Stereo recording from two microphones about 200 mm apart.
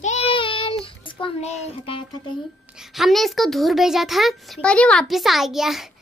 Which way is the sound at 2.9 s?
Centre (ahead or behind).